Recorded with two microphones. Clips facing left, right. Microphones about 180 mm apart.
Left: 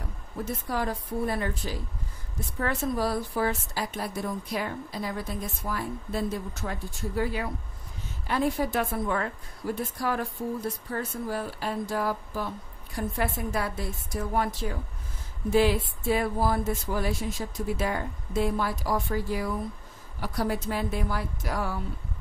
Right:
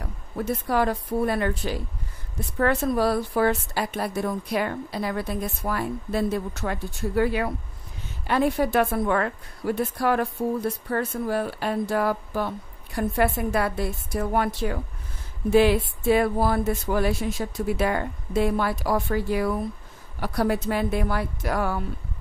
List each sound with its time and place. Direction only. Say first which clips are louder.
0.5 s a woman's voice: right 7 dB; 70° right (ahead or behind)